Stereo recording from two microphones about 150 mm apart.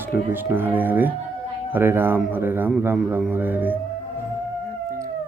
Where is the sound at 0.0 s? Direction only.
15° right (ahead or behind).